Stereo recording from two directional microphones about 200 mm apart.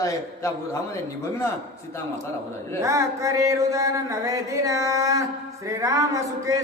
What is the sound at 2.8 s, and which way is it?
A man's voice, 15° right (ahead or behind).